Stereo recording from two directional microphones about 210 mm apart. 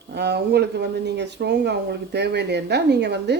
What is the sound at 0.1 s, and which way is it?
Speech, 50° right (ahead or behind).